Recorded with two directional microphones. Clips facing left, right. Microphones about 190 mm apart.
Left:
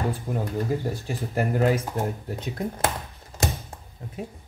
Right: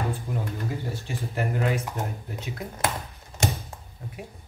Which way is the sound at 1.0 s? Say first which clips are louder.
Left 3 dB; 40° left (ahead or behind).